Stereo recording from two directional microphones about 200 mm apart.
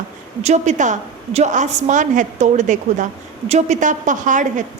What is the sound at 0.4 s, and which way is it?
A woman's voice, 35° right (ahead or behind).